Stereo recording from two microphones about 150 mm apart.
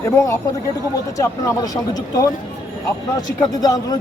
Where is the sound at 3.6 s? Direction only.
25° left (ahead or behind).